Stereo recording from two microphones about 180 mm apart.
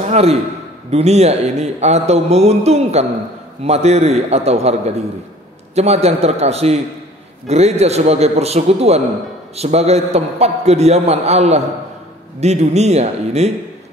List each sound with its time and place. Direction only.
0.0 s a man's voice: 35° right (ahead or behind)